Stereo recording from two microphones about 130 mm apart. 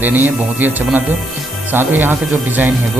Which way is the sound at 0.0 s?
15° right (ahead or behind).